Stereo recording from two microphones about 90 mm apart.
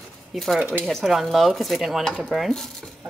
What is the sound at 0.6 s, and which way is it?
Speech, 20° right (ahead or behind).